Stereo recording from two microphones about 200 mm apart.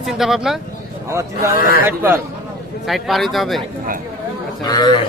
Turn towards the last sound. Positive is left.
turn(degrees=20)  # may be behind; listen again after turning